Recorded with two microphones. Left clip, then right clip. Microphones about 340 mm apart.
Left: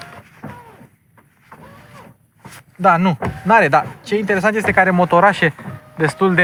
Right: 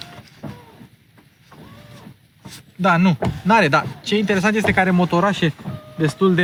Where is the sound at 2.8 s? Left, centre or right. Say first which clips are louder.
Left 4 dB; centre.